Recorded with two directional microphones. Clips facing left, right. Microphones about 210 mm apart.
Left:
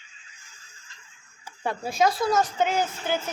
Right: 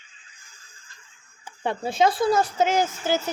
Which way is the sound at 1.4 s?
25° right (ahead or behind).